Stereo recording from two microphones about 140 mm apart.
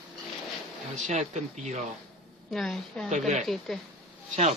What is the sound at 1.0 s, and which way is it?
Speech, 60° right (ahead or behind).